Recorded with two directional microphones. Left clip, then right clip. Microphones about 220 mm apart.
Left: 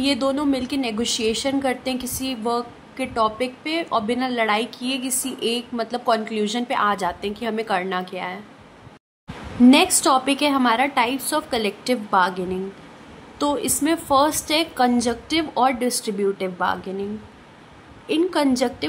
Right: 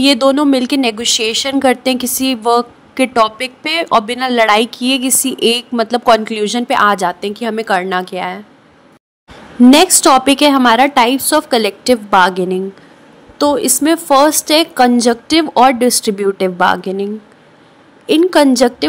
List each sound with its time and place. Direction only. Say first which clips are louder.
0.0 s a woman's voice: right 11 dB; 35° right (ahead or behind)
9.7 s a woman's voice: right 8 dB; 30° right (ahead or behind)